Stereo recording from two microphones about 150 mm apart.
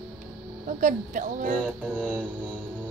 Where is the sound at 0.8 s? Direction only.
60° right (ahead or behind).